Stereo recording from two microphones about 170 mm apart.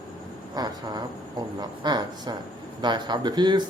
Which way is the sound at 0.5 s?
25° right (ahead or behind).